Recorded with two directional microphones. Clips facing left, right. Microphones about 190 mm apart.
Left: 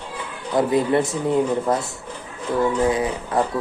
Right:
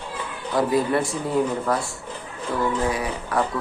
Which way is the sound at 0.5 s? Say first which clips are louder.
Left 3 dB; 20° left (ahead or behind).